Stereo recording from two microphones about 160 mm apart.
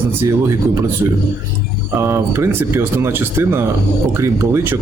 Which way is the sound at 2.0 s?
15° right (ahead or behind).